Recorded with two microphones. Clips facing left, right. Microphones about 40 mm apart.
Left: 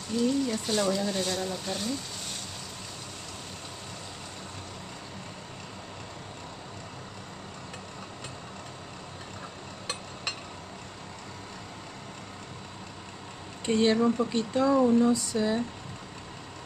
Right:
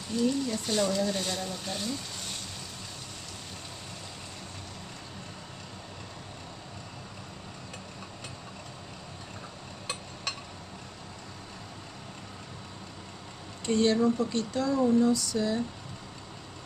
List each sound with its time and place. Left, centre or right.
0.1 s speech: centre
13.7 s speech: left
14.8 s a sound: left